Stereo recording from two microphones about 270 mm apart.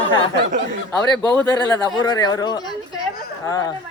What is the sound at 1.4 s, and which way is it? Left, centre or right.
Speech, centre.